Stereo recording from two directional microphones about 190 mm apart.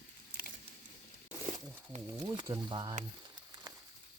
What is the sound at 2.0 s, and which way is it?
Speech, 20° right (ahead or behind).